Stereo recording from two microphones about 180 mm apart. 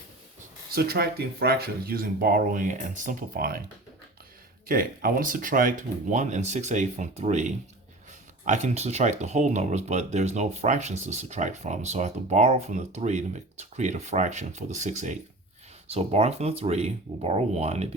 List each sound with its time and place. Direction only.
0.7 s speech: 60° right (ahead or behind)
4.7 s speech: 50° right (ahead or behind); by 17.8 s 35° right (ahead or behind)